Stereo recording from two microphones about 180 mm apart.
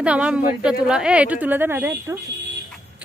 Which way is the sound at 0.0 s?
5° right (ahead or behind).